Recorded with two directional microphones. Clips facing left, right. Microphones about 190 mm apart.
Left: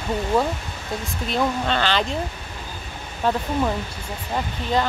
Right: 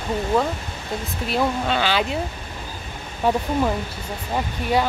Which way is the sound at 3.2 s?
10° right (ahead or behind).